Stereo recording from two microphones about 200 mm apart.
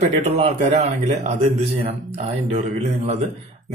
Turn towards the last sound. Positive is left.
turn(degrees=-35)  # may be behind; listen again after turning